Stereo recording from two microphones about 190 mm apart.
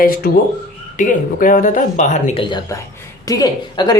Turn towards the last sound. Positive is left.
turn(degrees=20)  # may be behind; listen again after turning